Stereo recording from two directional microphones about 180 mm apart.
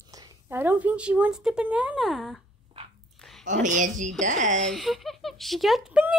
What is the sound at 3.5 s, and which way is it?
A woman's voice, 45° right (ahead or behind).